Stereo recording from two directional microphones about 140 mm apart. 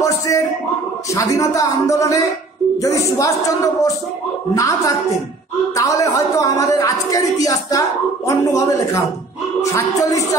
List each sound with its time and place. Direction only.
1.1 s speech: 25° left (ahead or behind)